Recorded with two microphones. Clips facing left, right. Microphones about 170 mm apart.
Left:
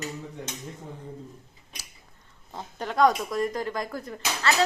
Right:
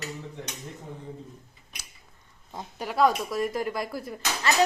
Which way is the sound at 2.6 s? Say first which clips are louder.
Left 1 dB; 10° right (ahead or behind).